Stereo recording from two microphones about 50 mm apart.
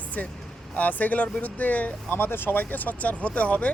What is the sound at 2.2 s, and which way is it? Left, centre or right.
Speech, left.